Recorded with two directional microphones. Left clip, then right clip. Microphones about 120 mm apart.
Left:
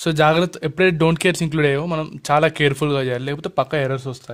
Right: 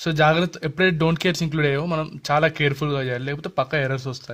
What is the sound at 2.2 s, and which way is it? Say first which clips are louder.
Speech: left 4 dB; 35° left (ahead or behind).